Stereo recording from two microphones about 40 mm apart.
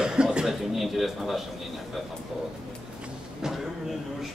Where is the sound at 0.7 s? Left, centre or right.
Centre.